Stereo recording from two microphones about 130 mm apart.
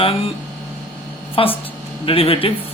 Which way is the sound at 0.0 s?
45° left (ahead or behind).